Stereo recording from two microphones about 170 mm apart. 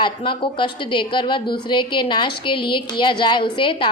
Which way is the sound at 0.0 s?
30° left (ahead or behind).